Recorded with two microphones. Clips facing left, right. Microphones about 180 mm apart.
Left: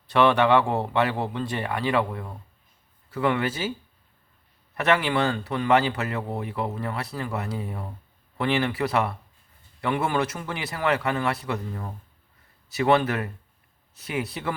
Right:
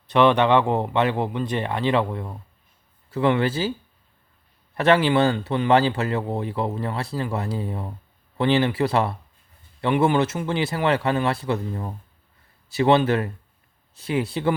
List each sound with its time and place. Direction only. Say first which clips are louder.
0.1 s a man's voice: right 2 dB; 20° right (ahead or behind)
4.7 s a man's voice: right 5 dB; 30° right (ahead or behind)